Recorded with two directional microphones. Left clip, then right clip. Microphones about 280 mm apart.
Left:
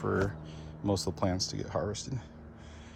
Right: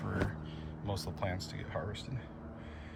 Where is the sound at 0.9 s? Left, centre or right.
Left.